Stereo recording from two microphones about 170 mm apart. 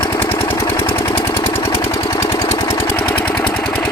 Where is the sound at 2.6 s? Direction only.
20° left (ahead or behind).